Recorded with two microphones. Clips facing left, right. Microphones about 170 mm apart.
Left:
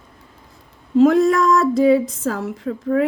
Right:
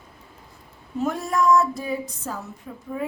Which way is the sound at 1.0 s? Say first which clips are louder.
Left 11 dB; 90° left.